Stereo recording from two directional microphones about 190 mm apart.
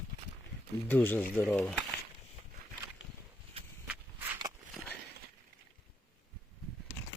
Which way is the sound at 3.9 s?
10° right (ahead or behind).